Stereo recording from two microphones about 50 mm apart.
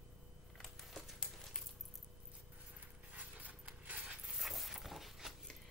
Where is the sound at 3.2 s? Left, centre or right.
Right.